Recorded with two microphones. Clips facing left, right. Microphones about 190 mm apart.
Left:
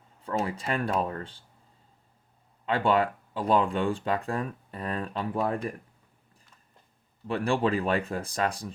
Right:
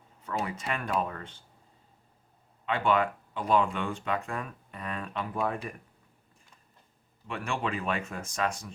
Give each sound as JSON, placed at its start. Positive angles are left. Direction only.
{"t": 0.4, "sound": "speech", "side_deg": 35}
{"t": 2.6, "sound": "speech", "side_deg": 35}
{"t": 7.3, "sound": "speech", "side_deg": 35}